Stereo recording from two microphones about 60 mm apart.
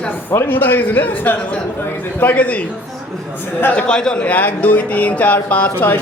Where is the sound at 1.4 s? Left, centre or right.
Centre.